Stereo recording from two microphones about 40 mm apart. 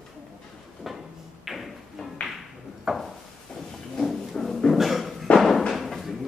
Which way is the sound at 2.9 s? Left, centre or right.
Centre.